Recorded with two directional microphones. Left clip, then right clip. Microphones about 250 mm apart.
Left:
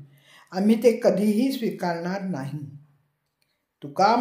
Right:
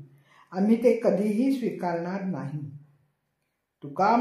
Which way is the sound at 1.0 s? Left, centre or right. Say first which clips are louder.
Left 3 dB; left.